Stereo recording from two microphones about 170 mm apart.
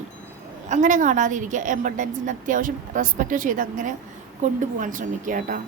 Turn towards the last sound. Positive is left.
turn(degrees=-50)  # may be behind; listen again after turning